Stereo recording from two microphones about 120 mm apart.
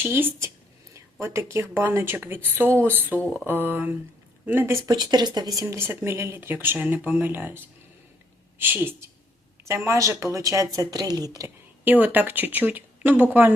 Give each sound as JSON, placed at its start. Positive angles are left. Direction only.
{"t": 0.0, "sound": "a woman's voice", "side_deg": -20}
{"t": 4.9, "sound": "speech", "side_deg": -35}
{"t": 5.6, "sound": "a woman's voice", "side_deg": -20}
{"t": 11.9, "sound": "speech", "side_deg": -15}